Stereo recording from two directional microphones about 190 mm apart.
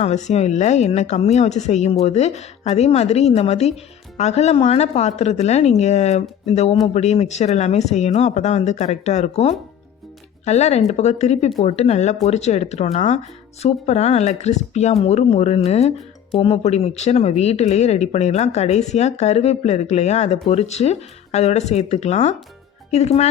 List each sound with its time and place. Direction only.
0.0 s speech: 35° left (ahead or behind)